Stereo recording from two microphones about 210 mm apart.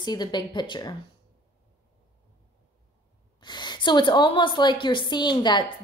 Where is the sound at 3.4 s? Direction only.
20° left (ahead or behind).